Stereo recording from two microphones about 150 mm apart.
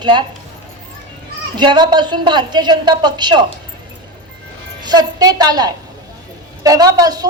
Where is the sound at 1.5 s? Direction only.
30° right (ahead or behind).